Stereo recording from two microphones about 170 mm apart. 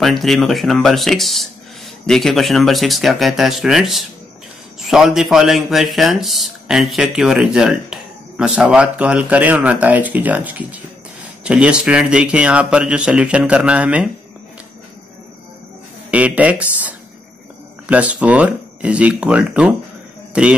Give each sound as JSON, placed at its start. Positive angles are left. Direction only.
{"t": 0.0, "sound": "speech", "side_deg": 0}
{"t": 16.1, "sound": "speech", "side_deg": -10}